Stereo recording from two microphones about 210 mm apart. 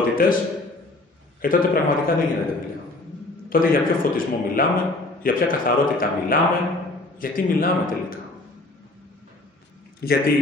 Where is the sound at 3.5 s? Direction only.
40° left (ahead or behind).